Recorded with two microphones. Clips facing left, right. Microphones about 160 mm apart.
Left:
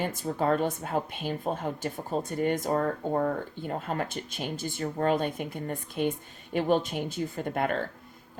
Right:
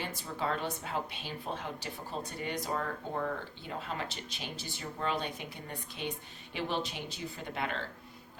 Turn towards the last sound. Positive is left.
turn(degrees=50)  # may be behind; listen again after turning